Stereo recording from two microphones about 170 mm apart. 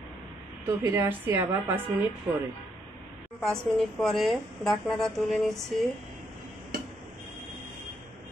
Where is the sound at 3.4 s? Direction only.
5° left (ahead or behind).